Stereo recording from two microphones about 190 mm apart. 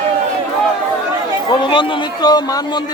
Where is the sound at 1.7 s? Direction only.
25° left (ahead or behind).